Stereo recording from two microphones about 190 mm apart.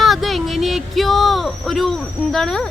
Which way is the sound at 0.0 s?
Centre (ahead or behind).